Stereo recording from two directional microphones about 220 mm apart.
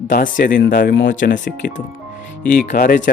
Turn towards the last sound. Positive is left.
turn(degrees=40)  # may be behind; listen again after turning